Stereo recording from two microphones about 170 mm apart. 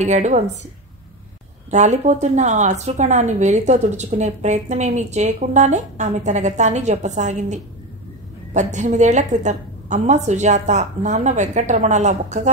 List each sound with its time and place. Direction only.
0.0 s a woman's voice: 45° right (ahead or behind)
1.7 s a woman's voice: 45° right (ahead or behind)